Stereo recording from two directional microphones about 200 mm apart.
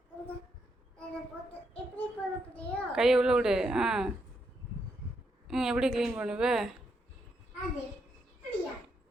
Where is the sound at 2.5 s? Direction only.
Centre (ahead or behind).